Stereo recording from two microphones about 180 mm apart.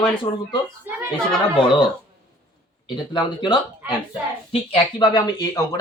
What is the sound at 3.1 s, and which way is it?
Speech, 25° left (ahead or behind).